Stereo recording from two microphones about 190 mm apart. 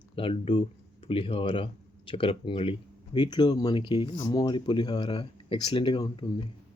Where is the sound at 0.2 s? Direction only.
30° left (ahead or behind).